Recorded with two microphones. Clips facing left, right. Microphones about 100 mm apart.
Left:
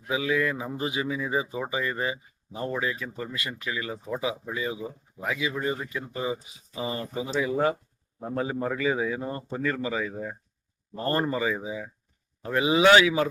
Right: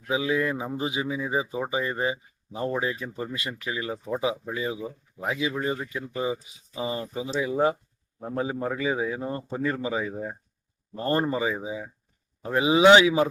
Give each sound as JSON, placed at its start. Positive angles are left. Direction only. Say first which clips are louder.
{"t": 0.1, "sound": "speech", "louder": "right 1 dB", "side_deg": -25}
{"t": 7.0, "sound": "speech", "louder": "even", "side_deg": 55}
{"t": 7.3, "sound": "speech", "louder": "right 1 dB", "side_deg": -15}
{"t": 8.7, "sound": "speech", "louder": "left 1 dB", "side_deg": -15}